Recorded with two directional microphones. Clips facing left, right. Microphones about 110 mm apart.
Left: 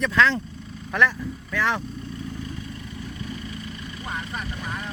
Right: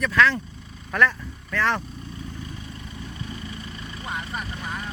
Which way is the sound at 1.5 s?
15° left (ahead or behind).